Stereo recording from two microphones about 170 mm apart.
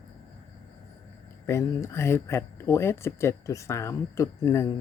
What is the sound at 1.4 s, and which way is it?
Speech, 15° left (ahead or behind).